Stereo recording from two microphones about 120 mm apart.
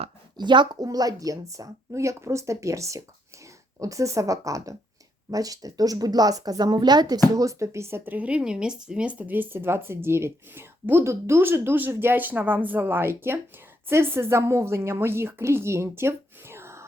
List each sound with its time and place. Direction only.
0.3 s a woman's voice: 40° right (ahead or behind); by 16.8 s 20° right (ahead or behind)